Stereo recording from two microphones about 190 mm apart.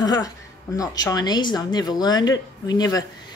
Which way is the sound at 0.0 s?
20° left (ahead or behind).